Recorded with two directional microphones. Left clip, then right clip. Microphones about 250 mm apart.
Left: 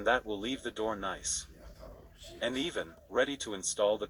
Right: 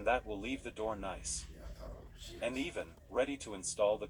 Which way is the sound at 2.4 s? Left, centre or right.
Left.